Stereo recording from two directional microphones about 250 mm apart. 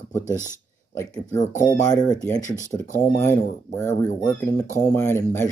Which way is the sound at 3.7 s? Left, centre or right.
Centre.